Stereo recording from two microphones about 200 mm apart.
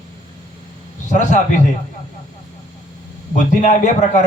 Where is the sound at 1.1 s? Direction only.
35° left (ahead or behind).